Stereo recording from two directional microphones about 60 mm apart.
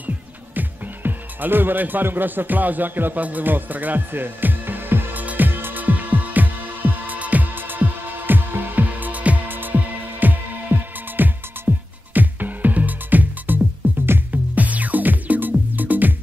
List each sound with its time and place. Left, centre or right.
0.6 s speech: right
5.2 s music: right